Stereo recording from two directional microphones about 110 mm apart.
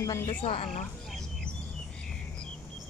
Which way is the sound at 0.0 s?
30° left (ahead or behind).